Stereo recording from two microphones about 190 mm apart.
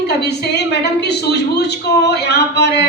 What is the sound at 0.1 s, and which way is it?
A woman's voice, 60° left (ahead or behind).